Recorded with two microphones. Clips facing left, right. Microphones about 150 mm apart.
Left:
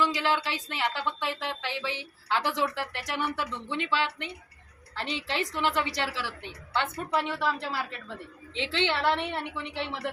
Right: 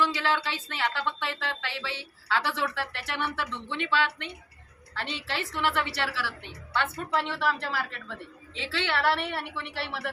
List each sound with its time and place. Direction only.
0.0 s a woman's voice: 15° left (ahead or behind)